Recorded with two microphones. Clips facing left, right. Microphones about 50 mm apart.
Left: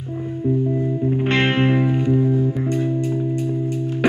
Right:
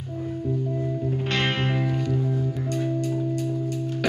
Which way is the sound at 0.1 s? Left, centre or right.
Centre.